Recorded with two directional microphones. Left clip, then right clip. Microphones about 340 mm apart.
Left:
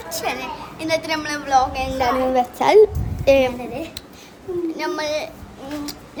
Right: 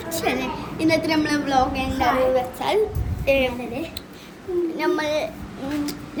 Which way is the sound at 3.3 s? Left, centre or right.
Left.